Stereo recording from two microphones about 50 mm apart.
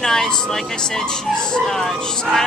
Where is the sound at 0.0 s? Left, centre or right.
Centre.